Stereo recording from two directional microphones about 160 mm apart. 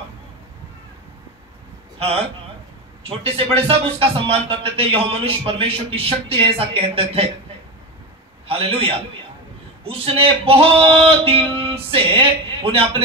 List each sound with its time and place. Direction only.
3.0 s a man's voice: 35° right (ahead or behind)
8.5 s a man's voice: 35° right (ahead or behind)